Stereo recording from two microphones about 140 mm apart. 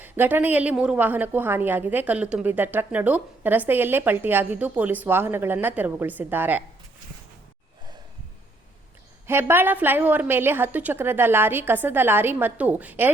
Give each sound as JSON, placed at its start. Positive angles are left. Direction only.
{"t": 0.0, "sound": "a woman's voice", "side_deg": -15}
{"t": 9.2, "sound": "a woman's voice", "side_deg": -15}